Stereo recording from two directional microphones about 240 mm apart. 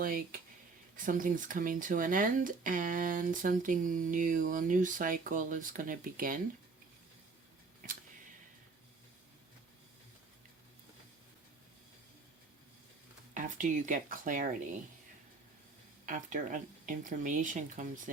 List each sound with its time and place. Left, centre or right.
0.0 s speech: right
13.3 s speech: right
16.0 s speech: right